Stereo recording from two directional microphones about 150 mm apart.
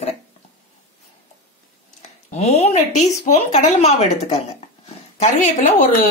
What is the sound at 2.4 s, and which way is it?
A woman's voice, 45° left (ahead or behind).